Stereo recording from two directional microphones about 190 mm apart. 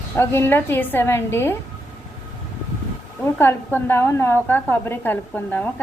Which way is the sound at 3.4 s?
10° left (ahead or behind).